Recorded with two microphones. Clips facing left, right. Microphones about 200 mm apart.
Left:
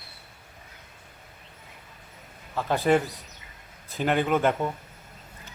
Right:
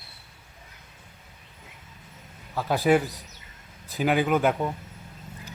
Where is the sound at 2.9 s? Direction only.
5° right (ahead or behind).